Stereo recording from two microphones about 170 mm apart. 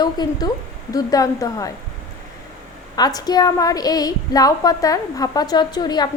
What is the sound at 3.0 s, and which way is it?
Child singing, 25° left (ahead or behind).